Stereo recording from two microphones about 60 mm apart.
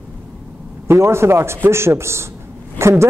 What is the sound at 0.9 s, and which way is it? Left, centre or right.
A woman's voice, right.